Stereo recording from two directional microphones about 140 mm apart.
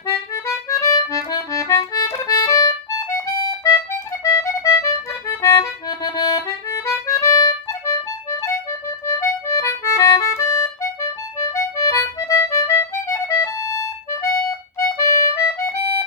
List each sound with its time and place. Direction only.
0.1 s accordion: 25° left (ahead or behind)
4.2 s accordion: 20° left (ahead or behind)